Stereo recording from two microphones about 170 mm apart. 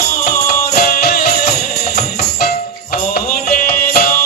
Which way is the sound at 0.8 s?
65° left (ahead or behind).